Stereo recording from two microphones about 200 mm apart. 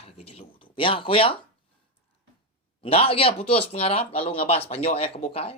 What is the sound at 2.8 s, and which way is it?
Speech, 30° left (ahead or behind).